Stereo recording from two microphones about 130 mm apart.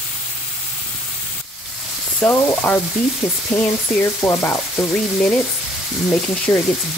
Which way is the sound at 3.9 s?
20° left (ahead or behind).